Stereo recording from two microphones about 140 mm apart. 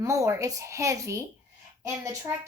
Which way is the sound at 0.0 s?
25° right (ahead or behind).